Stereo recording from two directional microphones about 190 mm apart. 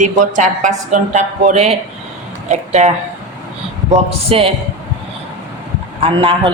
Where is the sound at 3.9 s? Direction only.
30° right (ahead or behind).